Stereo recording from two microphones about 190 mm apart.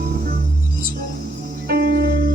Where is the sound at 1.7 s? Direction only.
55° right (ahead or behind).